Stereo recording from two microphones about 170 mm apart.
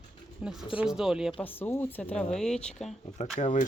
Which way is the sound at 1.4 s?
10° left (ahead or behind).